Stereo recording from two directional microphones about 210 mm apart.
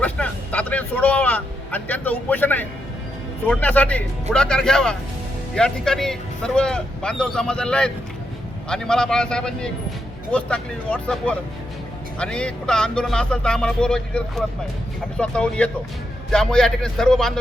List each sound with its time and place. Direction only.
0.0 s speech: 5° left (ahead or behind)